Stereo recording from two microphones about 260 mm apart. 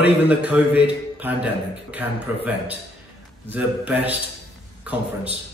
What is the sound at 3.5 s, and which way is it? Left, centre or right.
A man's voice, centre.